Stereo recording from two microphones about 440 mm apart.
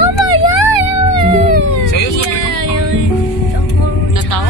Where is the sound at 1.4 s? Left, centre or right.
Left.